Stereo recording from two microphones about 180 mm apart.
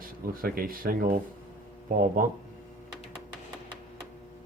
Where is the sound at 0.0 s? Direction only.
55° right (ahead or behind).